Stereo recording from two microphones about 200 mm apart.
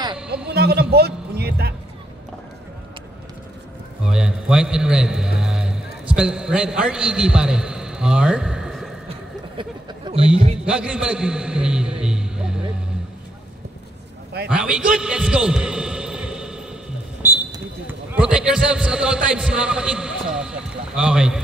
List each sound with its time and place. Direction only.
0.5 s music: 55° right (ahead or behind)
4.0 s a man's voice: 5° right (ahead or behind)
5.4 s music: 5° right (ahead or behind)
6.0 s a man's voice: 5° right (ahead or behind)
9.6 s a sound: 25° right (ahead or behind)
10.6 s a sound: 5° right (ahead or behind)
14.5 s a man's voice: 5° right (ahead or behind)
17.2 s a sound: 10° right (ahead or behind)
18.1 s a man's voice: 5° right (ahead or behind)